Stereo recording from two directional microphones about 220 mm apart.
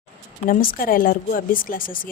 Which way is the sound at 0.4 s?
40° left (ahead or behind).